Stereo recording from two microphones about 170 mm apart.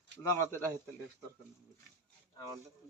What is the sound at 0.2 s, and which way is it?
Speech, 15° left (ahead or behind).